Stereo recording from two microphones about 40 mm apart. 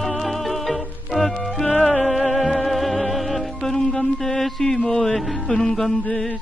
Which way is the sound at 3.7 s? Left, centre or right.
Centre.